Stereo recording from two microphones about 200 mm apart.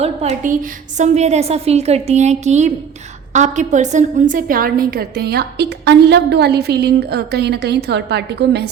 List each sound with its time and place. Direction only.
0.0 s a woman's voice: 30° right (ahead or behind); by 8.6 s 55° right (ahead or behind)